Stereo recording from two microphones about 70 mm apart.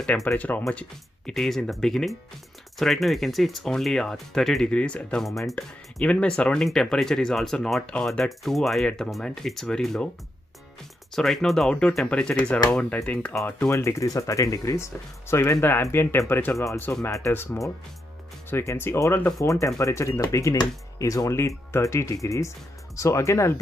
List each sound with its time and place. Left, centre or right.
0.4 s speech: left
0.7 s speech: centre
5.2 s speech: centre
11.1 s speech: centre
13.7 s speech: left